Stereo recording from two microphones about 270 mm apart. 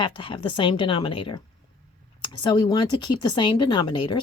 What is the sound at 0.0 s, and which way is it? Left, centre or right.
A woman's voice, centre.